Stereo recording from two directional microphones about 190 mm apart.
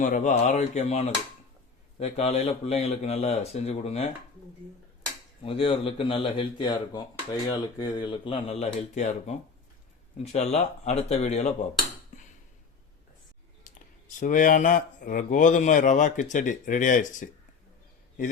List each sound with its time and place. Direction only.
0.0 s speech: 40° left (ahead or behind)
5.4 s speech: 30° left (ahead or behind)
13.7 s a sound: 45° left (ahead or behind)
14.2 s speech: 45° left (ahead or behind)